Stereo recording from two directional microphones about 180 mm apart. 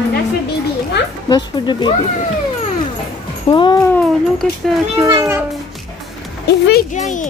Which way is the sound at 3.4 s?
25° left (ahead or behind).